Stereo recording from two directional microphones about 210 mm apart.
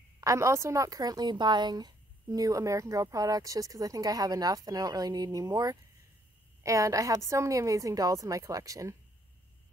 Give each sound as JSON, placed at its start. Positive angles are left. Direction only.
{"t": 0.2, "sound": "a woman's voice", "side_deg": -15}